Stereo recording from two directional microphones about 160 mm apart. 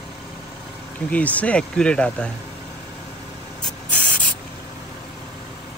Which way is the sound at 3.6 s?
5° left (ahead or behind).